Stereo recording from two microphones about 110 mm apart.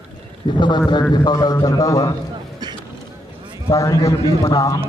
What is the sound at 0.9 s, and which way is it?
A man's voice, 45° left (ahead or behind).